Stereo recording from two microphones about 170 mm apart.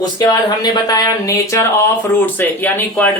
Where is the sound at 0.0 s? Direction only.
25° left (ahead or behind).